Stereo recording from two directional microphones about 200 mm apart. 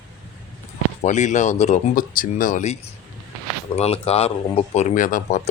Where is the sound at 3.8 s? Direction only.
30° left (ahead or behind).